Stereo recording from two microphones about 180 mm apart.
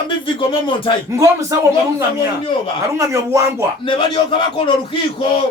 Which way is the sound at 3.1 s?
15° right (ahead or behind).